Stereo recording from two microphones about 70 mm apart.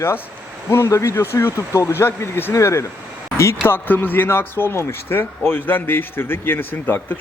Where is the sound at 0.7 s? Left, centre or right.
Left.